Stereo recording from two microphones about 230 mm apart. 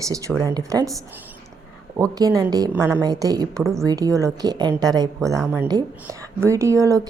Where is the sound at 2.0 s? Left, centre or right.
Centre.